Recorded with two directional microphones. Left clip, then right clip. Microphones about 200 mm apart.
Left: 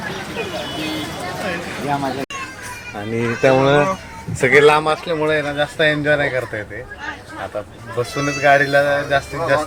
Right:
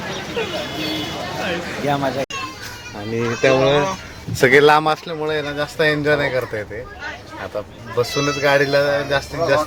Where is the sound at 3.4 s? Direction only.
25° left (ahead or behind).